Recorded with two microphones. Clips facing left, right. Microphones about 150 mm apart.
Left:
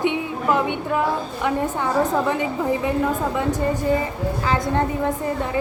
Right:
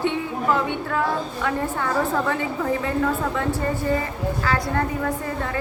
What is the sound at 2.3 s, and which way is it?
Speech, 20° left (ahead or behind).